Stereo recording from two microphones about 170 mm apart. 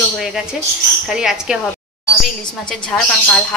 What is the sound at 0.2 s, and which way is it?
A woman's voice, 5° right (ahead or behind).